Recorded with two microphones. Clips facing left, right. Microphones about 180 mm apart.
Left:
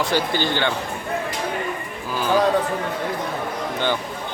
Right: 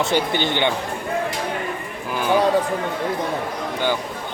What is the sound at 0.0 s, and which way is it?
Speech, 20° right (ahead or behind).